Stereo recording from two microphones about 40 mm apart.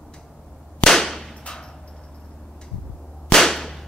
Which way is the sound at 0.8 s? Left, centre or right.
Centre.